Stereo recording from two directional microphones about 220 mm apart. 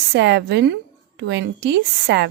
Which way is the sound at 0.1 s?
50° right (ahead or behind).